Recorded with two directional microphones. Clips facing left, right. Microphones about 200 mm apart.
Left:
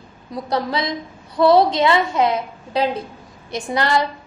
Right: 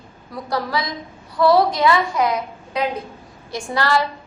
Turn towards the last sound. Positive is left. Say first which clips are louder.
# left 1 dB
turn(degrees=20)  # may be behind; listen again after turning